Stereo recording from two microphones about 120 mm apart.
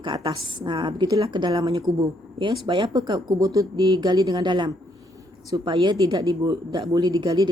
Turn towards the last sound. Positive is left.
turn(degrees=-35)  # may be behind; listen again after turning